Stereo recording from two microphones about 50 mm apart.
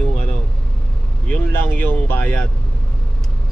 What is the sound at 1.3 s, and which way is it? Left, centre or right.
Speech, left.